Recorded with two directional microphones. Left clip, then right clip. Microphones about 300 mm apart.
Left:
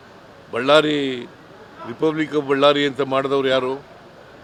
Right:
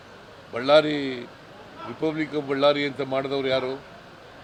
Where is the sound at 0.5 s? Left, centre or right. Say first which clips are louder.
Left 3 dB; left.